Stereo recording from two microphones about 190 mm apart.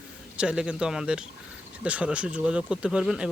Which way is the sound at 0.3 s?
5° right (ahead or behind).